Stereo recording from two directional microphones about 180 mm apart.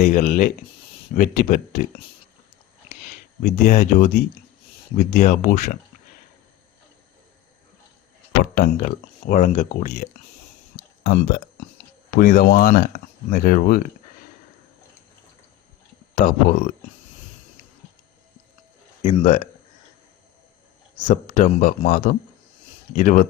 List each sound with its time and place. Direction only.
0.0 s speech: 45° left (ahead or behind)
2.9 s speech: 40° left (ahead or behind)
8.5 s speech: 50° left (ahead or behind)
12.1 s speech: 50° left (ahead or behind)
16.1 s speech: 45° left (ahead or behind)
19.0 s speech: 40° left (ahead or behind)
21.1 s speech: 40° left (ahead or behind)